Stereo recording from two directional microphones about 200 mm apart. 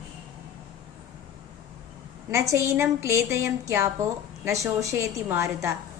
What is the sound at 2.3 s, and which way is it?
A woman's voice, 15° right (ahead or behind).